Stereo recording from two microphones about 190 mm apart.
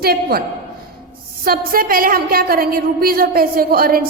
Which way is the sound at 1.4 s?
50° right (ahead or behind).